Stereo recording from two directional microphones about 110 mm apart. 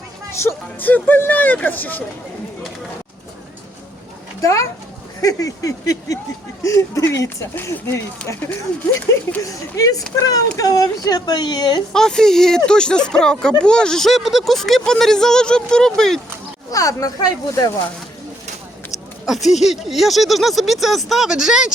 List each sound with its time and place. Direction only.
0.3 s speech: 20° left (ahead or behind)
4.4 s a child's voice: 30° left (ahead or behind)
9.4 s speech: 30° left (ahead or behind)
11.9 s speech: 5° left (ahead or behind)
16.7 s speech: 30° left (ahead or behind)
19.5 s speech: centre (ahead or behind)